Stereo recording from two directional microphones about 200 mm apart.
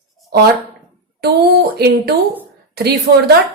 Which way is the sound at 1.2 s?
55° right (ahead or behind).